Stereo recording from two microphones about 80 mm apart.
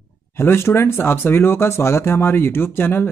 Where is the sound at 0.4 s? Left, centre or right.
Left.